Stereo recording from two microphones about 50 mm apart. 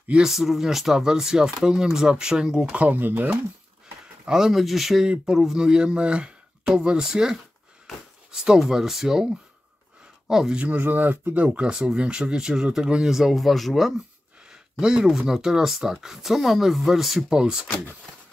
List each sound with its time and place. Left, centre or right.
0.2 s speech: centre
2.8 s speech: right
4.3 s speech: centre
5.0 s speech: centre
10.5 s speech: right
10.8 s speech: right
11.4 s speech: centre
14.5 s speech: centre
17.3 s speech: centre